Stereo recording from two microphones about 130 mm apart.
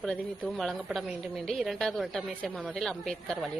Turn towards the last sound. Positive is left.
turn(degrees=0)  # may be behind; listen again after turning